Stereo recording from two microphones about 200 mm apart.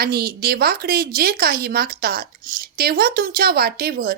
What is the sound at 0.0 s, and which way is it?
Speech, 50° right (ahead or behind).